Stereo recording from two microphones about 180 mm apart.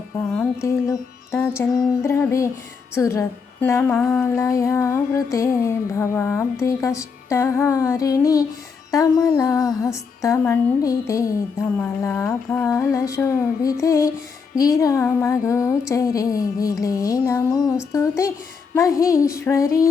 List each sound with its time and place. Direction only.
0.3 s speech: 15° left (ahead or behind)
15.9 s music: 20° left (ahead or behind)
18.7 s speech: 20° left (ahead or behind)